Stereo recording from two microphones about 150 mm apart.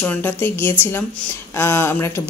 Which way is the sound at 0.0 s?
15° left (ahead or behind).